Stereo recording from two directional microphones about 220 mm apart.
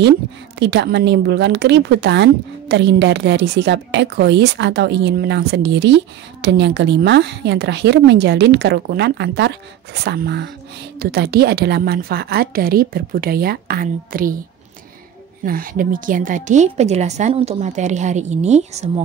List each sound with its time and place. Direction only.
0.6 s a woman's voice: 50° right (ahead or behind)
15.4 s speech: 40° right (ahead or behind)